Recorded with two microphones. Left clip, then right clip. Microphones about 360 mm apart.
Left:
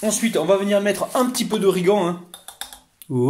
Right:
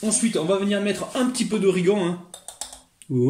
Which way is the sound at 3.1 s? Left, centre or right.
Left.